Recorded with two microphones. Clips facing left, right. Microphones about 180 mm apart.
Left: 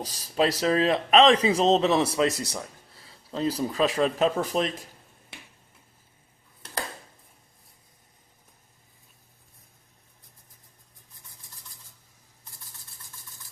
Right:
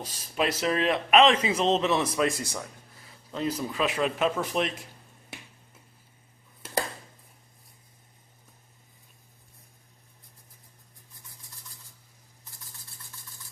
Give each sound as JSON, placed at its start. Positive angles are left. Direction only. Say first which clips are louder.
{"t": 0.0, "sound": "speech", "louder": "left 4 dB", "side_deg": 35}